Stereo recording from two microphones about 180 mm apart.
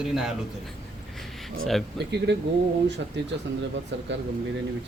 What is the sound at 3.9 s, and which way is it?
Speech, 80° right.